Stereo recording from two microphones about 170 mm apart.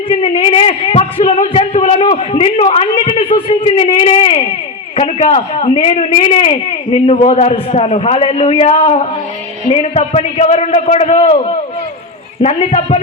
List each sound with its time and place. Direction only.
0.1 s a man's voice: 35° left (ahead or behind)